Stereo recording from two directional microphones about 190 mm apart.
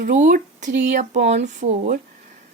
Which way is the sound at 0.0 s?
45° right (ahead or behind).